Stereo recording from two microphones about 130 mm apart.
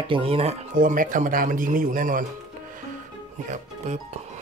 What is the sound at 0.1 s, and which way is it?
Speech, 45° right (ahead or behind).